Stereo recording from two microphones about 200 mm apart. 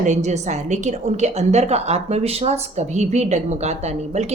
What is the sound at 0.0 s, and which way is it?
A woman's voice, 35° right (ahead or behind).